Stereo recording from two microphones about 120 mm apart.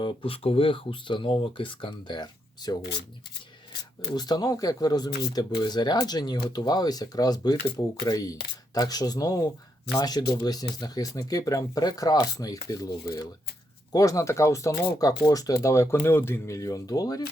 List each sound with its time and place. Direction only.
0.0 s speech: 50° left (ahead or behind)
4.1 s speech: 35° left (ahead or behind)